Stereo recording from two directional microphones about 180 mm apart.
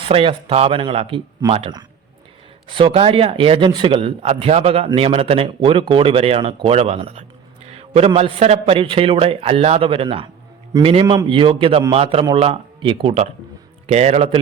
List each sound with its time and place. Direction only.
0.0 s a man's voice: 30° right (ahead or behind)